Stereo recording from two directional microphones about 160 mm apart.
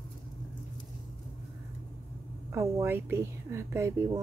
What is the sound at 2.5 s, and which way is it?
Speech, 15° right (ahead or behind).